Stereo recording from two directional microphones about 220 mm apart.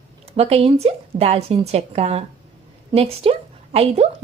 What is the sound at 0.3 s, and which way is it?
Speech, 30° right (ahead or behind).